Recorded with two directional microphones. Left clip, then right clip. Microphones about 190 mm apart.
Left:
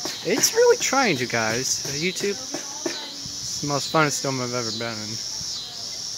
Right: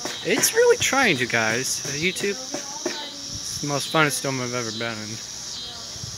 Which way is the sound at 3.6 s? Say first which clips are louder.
Even; 5° left (ahead or behind).